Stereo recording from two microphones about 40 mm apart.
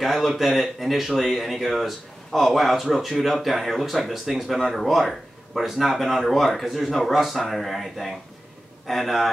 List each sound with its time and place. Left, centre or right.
0.0 s speech: centre